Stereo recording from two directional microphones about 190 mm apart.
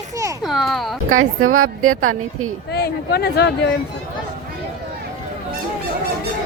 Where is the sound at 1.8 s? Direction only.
90° right.